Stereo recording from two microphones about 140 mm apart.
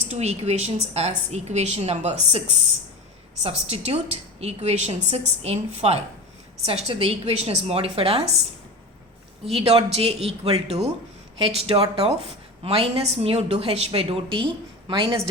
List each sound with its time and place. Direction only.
0.1 s a woman's voice: 50° right (ahead or behind)
3.4 s a woman's voice: 50° right (ahead or behind)
9.5 s a woman's voice: 40° right (ahead or behind)
11.3 s a woman's voice: 35° right (ahead or behind)